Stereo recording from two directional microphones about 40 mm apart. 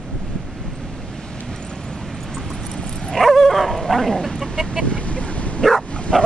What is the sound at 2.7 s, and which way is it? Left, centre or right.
Dog, centre.